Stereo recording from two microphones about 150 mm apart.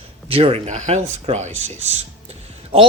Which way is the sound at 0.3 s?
40° right (ahead or behind).